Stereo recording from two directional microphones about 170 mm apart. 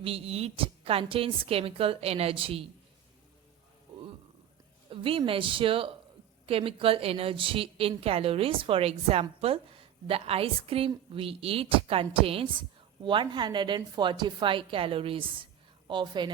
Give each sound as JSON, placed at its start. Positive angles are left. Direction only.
{"t": 0.0, "sound": "a woman's voice", "side_deg": -35}
{"t": 3.9, "sound": "a sound", "side_deg": -30}
{"t": 4.9, "sound": "a woman's voice", "side_deg": -30}